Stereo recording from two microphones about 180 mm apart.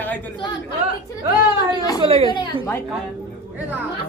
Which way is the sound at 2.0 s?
30° right (ahead or behind).